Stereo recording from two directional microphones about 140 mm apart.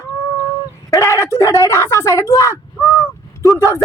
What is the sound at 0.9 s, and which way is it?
Speech, 25° left (ahead or behind).